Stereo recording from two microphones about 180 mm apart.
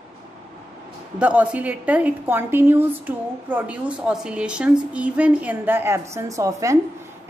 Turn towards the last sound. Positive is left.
turn(degrees=-15)  # may be behind; listen again after turning